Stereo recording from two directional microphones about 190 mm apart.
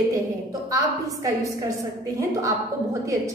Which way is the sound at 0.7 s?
15° right (ahead or behind).